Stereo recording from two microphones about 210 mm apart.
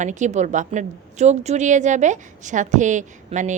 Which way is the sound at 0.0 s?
35° right (ahead or behind).